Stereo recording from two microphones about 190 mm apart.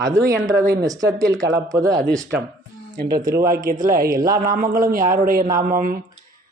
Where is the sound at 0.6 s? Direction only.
55° right (ahead or behind).